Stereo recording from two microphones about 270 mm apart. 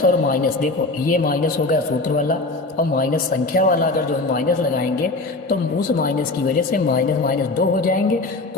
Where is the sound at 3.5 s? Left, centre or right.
Left.